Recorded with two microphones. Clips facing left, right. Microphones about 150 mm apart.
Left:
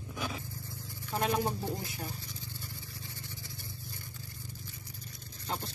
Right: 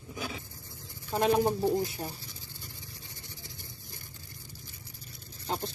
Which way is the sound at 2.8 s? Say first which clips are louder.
Left 2 dB; 20° right (ahead or behind).